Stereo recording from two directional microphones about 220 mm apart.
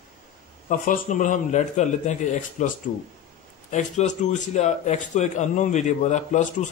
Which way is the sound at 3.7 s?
35° left (ahead or behind).